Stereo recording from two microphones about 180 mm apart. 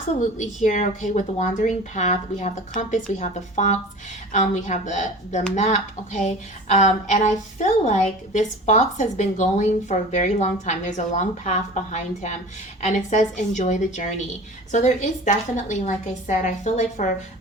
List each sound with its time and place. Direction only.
0.3 s a woman's voice: 45° left (ahead or behind)